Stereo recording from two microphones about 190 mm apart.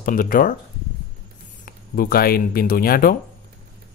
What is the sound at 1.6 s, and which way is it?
Speech, 50° left (ahead or behind).